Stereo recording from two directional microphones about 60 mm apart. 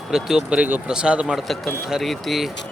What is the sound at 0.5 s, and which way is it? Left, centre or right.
Speech, right.